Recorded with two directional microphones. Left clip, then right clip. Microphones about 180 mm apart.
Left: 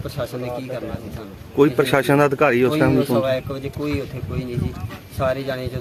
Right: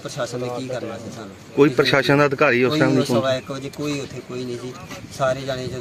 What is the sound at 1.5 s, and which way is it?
Speech, centre (ahead or behind).